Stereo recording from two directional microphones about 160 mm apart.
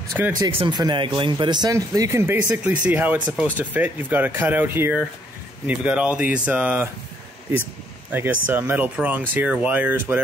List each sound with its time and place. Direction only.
0.2 s speech: 10° right (ahead or behind)
0.6 s speech: 25° right (ahead or behind); by 6.9 s 10° right (ahead or behind)
8.1 s speech: 10° right (ahead or behind)